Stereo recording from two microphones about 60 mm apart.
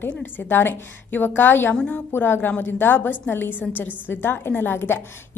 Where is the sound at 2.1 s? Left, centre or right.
Left.